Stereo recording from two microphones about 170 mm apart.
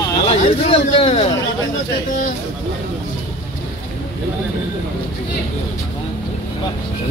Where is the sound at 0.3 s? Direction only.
35° left (ahead or behind).